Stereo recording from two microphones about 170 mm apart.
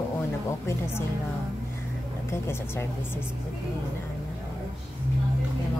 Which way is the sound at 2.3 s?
15° left (ahead or behind).